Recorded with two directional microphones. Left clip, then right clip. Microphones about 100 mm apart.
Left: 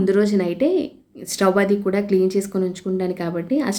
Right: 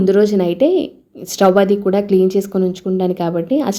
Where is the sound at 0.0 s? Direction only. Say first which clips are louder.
Right 5 dB; 35° right (ahead or behind).